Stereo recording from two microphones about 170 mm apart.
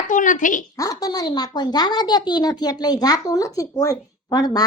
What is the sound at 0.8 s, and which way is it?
A woman's voice, 20° left (ahead or behind).